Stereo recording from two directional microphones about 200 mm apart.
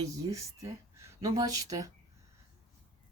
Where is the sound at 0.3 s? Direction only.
15° right (ahead or behind).